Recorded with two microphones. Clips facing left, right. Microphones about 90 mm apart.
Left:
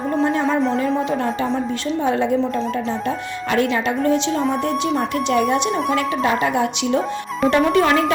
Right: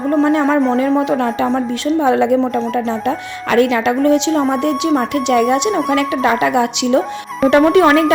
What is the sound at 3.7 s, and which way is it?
Speech, 85° right.